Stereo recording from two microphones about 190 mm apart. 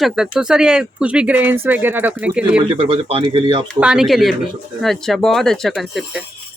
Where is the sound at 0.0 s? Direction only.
5° right (ahead or behind).